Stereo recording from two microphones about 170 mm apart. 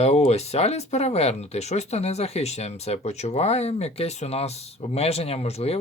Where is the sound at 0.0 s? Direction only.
40° left (ahead or behind).